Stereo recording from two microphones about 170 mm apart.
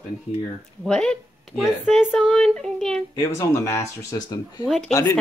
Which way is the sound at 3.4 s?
20° left (ahead or behind).